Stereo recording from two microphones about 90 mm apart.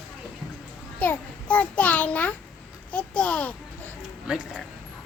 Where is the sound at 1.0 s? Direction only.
15° left (ahead or behind).